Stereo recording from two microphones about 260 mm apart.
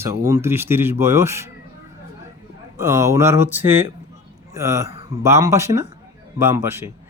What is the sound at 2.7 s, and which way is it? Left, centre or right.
Speech, centre.